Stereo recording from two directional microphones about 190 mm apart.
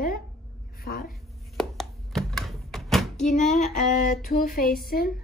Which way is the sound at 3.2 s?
40° left (ahead or behind).